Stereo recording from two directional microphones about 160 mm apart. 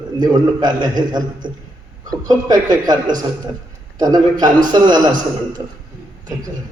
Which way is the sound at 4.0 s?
25° right (ahead or behind).